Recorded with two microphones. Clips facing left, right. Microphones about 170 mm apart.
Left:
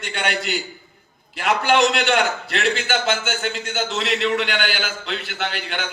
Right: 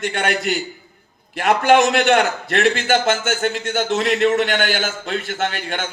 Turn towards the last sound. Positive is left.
turn(degrees=-45)  # may be behind; listen again after turning